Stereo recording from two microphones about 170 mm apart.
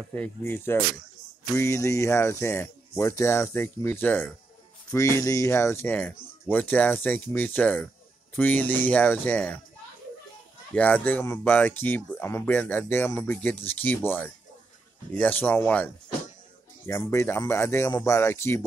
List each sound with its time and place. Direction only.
0.1 s speech: 10° left (ahead or behind)
10.7 s speech: 10° left (ahead or behind)